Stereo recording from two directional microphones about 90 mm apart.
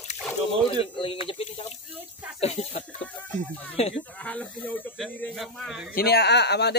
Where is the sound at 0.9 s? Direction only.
80° left.